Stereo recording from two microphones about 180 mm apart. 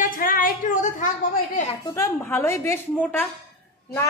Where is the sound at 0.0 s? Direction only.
50° left (ahead or behind).